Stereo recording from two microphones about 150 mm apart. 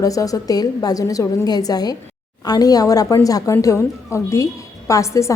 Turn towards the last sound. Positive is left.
turn(degrees=20)  # may be behind; listen again after turning